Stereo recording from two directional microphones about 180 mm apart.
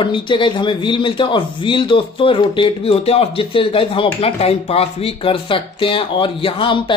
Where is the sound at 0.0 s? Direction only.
25° left (ahead or behind).